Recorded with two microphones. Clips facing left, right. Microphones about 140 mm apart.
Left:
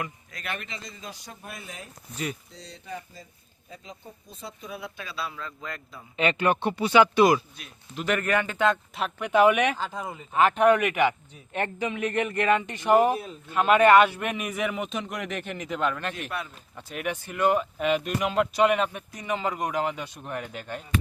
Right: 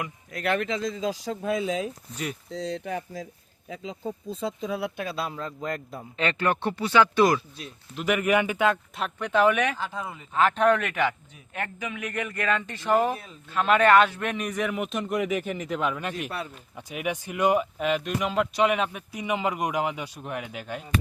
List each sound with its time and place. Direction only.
0.3 s speech: 75° right (ahead or behind)
4.9 s a man's voice: 50° right (ahead or behind)
6.1 s speech: 15° left (ahead or behind)
7.9 s speech: 10° right (ahead or behind); by 11.1 s 15° left (ahead or behind)
11.5 s speech: 30° left (ahead or behind); by 17.7 s 10° right (ahead or behind)
17.7 s speech: centre (ahead or behind)